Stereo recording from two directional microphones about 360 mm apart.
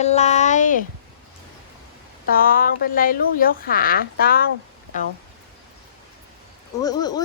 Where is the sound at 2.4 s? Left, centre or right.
Left.